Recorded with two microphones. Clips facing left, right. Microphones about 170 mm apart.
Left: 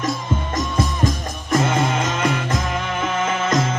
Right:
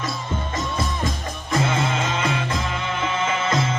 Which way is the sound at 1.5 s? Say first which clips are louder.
Left 4 dB; 45° left (ahead or behind).